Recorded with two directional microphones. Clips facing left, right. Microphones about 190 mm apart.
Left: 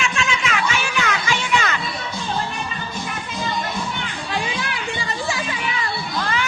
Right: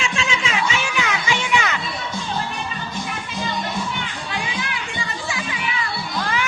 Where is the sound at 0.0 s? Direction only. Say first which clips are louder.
Left 1 dB; 30° right (ahead or behind).